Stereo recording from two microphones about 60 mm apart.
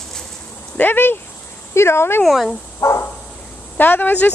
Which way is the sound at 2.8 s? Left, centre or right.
Left.